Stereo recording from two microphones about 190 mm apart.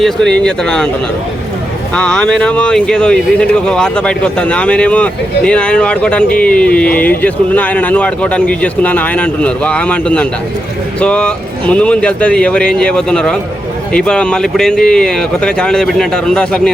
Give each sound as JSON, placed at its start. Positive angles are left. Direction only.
{"t": 0.0, "sound": "speech", "side_deg": 5}
{"t": 2.0, "sound": "speech", "side_deg": 5}